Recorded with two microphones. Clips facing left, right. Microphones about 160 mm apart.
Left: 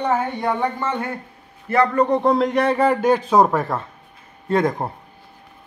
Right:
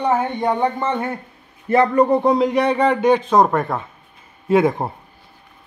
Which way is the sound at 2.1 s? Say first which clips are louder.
Right 2 dB; centre (ahead or behind).